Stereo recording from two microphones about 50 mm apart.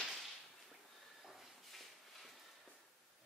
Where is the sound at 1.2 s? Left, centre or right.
Centre.